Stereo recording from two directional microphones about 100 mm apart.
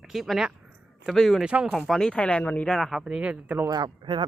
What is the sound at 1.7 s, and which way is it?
Speech, 5° left (ahead or behind).